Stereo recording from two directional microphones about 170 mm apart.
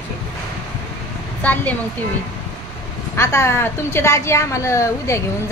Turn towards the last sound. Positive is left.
turn(degrees=15)  # may be behind; listen again after turning